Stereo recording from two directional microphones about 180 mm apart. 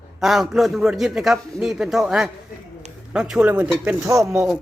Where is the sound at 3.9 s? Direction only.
15° right (ahead or behind).